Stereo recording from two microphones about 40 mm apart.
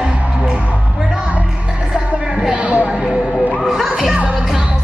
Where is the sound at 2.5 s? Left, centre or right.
Right.